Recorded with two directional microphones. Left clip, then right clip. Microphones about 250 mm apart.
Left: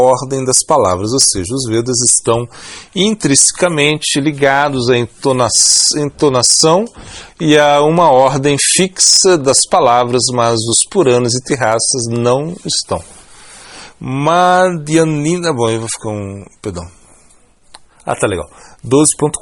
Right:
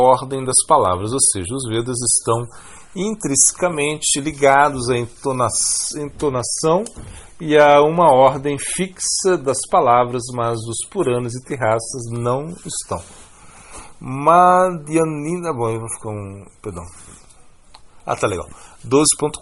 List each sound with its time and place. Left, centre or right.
0.0 s speech: left
0.3 s speech: left
2.9 s speech: left
14.0 s speech: left
18.0 s speech: left